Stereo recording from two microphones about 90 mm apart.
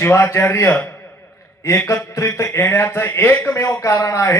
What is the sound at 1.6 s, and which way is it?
Speech, 30° left (ahead or behind).